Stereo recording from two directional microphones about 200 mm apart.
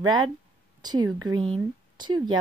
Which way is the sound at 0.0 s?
20° right (ahead or behind).